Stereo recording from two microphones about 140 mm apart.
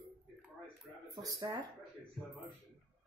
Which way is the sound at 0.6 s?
30° right (ahead or behind).